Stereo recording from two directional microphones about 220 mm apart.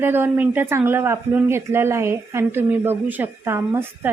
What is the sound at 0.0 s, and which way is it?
Speech, 10° right (ahead or behind).